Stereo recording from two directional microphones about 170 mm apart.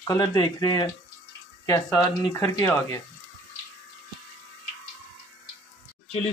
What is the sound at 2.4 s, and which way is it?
Speech, 10° left (ahead or behind).